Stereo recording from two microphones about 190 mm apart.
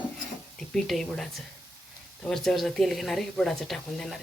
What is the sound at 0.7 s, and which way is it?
Speech, centre (ahead or behind).